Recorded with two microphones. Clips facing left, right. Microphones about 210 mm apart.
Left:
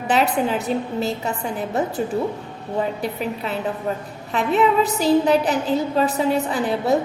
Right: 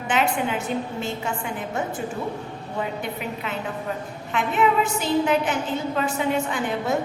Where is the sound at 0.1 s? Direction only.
35° left (ahead or behind).